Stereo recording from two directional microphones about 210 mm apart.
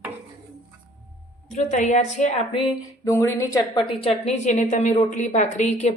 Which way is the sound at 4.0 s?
30° left (ahead or behind).